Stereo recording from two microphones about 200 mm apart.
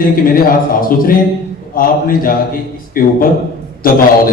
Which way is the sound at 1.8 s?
45° left (ahead or behind).